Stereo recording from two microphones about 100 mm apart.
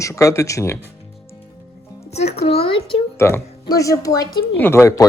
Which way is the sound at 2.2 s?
90° left.